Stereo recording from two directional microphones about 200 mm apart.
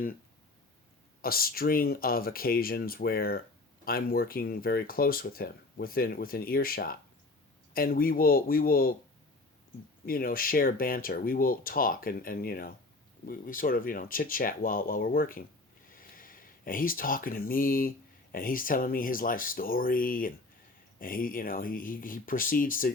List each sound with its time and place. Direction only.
1.2 s speech: 45° left (ahead or behind)
10.1 s speech: 45° left (ahead or behind)